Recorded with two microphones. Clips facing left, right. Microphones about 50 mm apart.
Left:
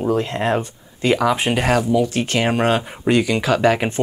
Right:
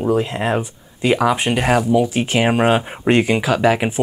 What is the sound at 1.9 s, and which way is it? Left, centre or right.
Speech, centre.